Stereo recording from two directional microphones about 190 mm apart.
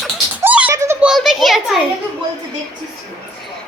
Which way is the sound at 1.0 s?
Centre (ahead or behind).